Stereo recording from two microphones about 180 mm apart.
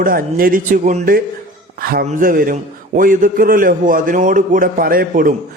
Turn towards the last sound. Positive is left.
turn(degrees=-50)  # may be behind; listen again after turning